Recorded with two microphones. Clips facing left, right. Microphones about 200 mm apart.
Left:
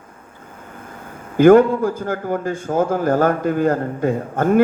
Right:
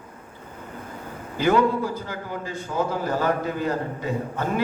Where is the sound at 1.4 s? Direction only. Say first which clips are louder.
Left 10 dB; 50° left (ahead or behind).